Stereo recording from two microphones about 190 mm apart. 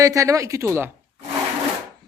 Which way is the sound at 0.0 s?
15° right (ahead or behind).